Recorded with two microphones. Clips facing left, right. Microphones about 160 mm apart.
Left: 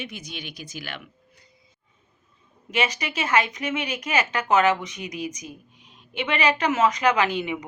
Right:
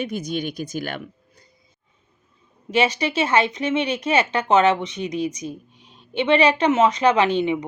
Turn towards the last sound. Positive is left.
turn(degrees=-30)  # may be behind; listen again after turning